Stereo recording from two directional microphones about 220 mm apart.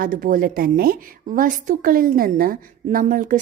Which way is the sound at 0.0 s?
40° right (ahead or behind).